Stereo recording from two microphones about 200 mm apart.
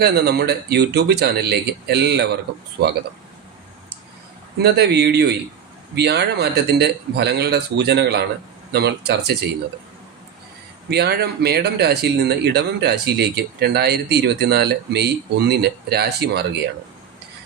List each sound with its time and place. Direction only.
0.0 s speech: 55° right (ahead or behind)
4.6 s speech: 55° right (ahead or behind)
10.8 s speech: 55° right (ahead or behind)